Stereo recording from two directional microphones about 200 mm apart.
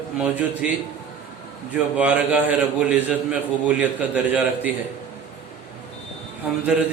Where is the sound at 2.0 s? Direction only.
5° right (ahead or behind).